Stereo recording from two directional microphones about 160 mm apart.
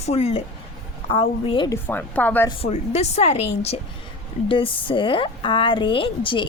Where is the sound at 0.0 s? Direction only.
40° left (ahead or behind).